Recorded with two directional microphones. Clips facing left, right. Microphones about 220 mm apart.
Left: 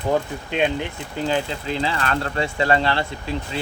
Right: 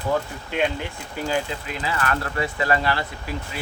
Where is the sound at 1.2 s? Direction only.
25° left (ahead or behind).